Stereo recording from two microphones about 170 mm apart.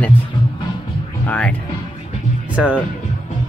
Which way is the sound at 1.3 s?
10° left (ahead or behind).